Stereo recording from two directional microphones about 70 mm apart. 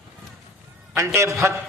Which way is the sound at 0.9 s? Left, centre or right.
Right.